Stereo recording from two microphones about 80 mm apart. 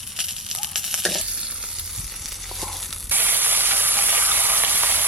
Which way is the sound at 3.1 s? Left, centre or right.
Right.